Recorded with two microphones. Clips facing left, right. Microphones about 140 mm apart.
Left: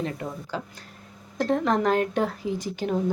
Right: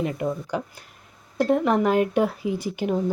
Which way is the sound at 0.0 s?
15° right (ahead or behind).